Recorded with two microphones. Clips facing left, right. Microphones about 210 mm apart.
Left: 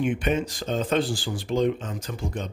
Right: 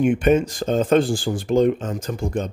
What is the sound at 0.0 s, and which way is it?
Speech, 45° right (ahead or behind).